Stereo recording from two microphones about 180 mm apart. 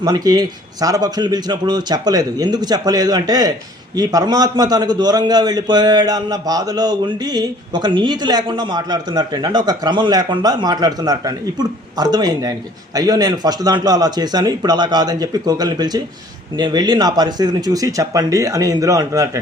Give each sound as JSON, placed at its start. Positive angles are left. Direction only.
{"t": 0.0, "sound": "a man's voice", "side_deg": -20}